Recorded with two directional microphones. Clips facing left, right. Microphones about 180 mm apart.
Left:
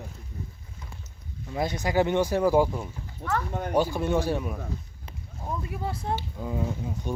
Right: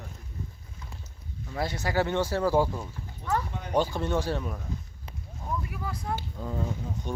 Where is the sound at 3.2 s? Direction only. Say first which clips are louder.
Even; 50° left (ahead or behind).